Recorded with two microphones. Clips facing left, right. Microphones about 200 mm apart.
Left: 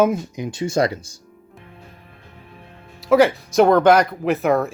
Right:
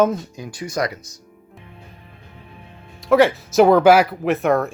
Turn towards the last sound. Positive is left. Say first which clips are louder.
# even
turn(degrees=0)  # may be behind; listen again after turning